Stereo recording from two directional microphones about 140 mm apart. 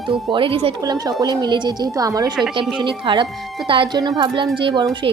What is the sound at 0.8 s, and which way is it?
A woman's voice, 25° right (ahead or behind).